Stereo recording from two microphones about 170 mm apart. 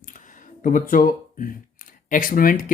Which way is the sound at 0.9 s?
55° left (ahead or behind).